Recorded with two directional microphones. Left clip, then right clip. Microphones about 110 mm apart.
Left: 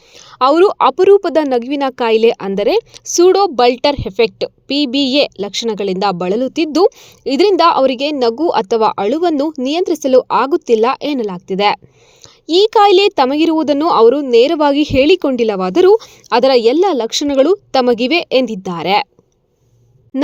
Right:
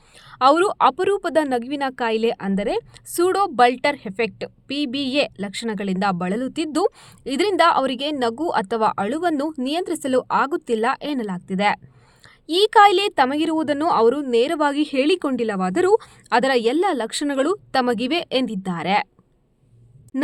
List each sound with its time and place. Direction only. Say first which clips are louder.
0.1 s a woman's voice: left 4 dB; 30° left (ahead or behind)
20.1 s music: left 7 dB; 35° left (ahead or behind)